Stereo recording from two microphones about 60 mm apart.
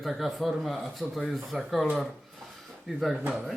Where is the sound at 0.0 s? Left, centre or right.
Centre.